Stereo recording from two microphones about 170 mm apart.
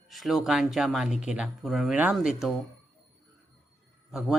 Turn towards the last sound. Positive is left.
turn(degrees=0)  # may be behind; listen again after turning